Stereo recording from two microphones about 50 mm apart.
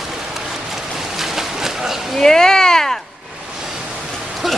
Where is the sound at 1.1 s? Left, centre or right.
Centre.